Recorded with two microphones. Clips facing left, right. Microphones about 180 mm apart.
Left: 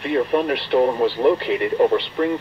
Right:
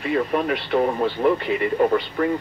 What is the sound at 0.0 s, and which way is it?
Speech, 30° left (ahead or behind).